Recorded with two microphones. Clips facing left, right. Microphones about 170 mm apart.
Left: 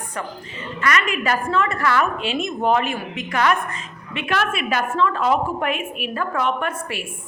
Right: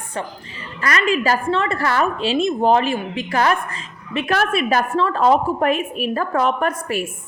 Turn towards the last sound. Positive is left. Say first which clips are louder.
# right 5 dB
turn(degrees=-40)  # may be behind; listen again after turning